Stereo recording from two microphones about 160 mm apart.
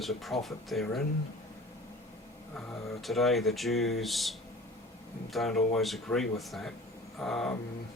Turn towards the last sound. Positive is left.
turn(degrees=5)  # may be behind; listen again after turning